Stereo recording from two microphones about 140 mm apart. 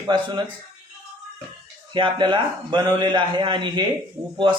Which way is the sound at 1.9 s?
35° right (ahead or behind).